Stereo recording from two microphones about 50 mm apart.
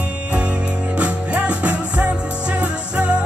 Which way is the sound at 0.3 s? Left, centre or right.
Right.